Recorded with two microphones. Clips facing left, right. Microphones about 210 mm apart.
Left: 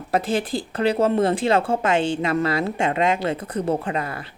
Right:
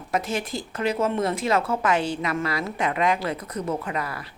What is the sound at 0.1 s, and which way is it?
Speech, 30° left (ahead or behind).